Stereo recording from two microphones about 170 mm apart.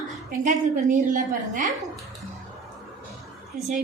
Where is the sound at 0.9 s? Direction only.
50° right (ahead or behind).